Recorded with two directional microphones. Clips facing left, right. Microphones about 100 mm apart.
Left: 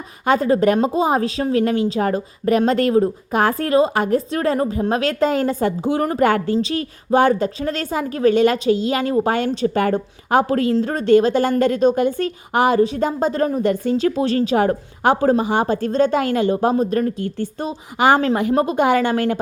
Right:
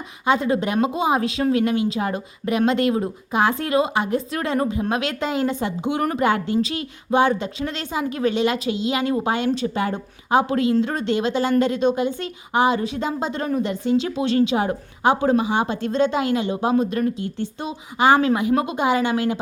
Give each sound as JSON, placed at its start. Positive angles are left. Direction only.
{"t": 0.3, "sound": "a woman's voice", "side_deg": 40}
{"t": 4.3, "sound": "speech", "side_deg": 35}
{"t": 6.1, "sound": "a woman's voice", "side_deg": 50}
{"t": 6.6, "sound": "a woman's voice", "side_deg": 35}
{"t": 10.8, "sound": "a woman's voice", "side_deg": 35}
{"t": 18.8, "sound": "a woman's voice", "side_deg": 50}